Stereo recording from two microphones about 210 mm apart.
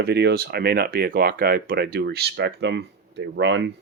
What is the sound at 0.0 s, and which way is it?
Speech, 50° right (ahead or behind).